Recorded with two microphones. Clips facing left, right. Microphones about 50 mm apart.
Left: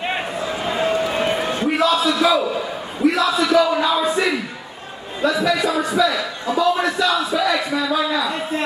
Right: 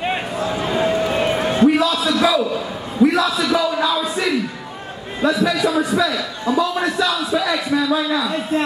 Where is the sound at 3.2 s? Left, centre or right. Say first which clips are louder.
Left 2 dB; left.